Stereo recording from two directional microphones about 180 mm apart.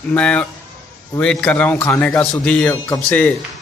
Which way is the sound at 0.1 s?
5° left (ahead or behind).